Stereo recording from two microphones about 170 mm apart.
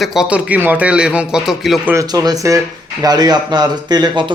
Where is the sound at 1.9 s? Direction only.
20° right (ahead or behind).